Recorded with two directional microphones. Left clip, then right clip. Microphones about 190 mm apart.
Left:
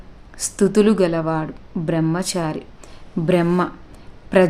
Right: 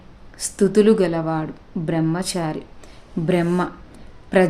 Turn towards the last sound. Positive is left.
turn(degrees=15)  # may be behind; listen again after turning